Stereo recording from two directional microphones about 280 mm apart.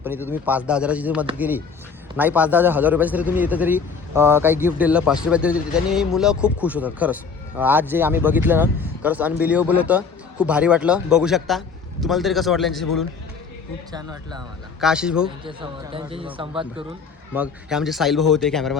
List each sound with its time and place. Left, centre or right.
0.0 s a man's voice: centre
13.9 s a man's voice: centre
14.8 s a man's voice: centre
15.4 s a man's voice: centre
17.3 s a man's voice: centre